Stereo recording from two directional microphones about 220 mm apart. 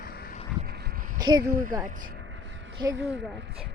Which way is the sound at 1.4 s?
40° right (ahead or behind).